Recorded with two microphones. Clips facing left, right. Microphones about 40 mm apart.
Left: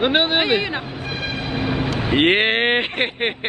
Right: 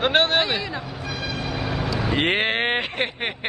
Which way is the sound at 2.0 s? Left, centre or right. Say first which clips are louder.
Left 5 dB; left.